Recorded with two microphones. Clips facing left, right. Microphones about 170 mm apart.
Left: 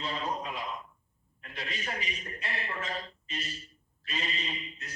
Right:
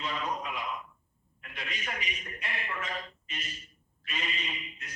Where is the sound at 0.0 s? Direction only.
35° left (ahead or behind).